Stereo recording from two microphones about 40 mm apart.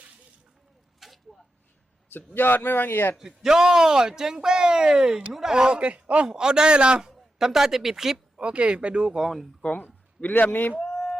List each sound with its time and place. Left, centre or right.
0.9 s a sound: centre
2.0 s a man's voice: left
3.2 s a man's voice: centre
5.9 s a man's voice: right
6.2 s speech: centre
7.3 s a man's voice: centre
8.4 s speech: right
9.2 s speech: centre
9.7 s a sound: left
10.2 s a man's voice: left
10.8 s a sound: centre